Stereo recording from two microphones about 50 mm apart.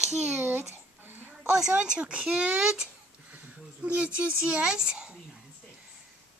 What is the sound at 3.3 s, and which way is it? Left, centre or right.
Speech, right.